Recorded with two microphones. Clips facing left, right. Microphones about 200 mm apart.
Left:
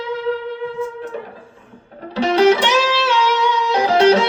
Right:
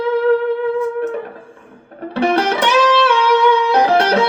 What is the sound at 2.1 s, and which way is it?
Music, 60° right (ahead or behind).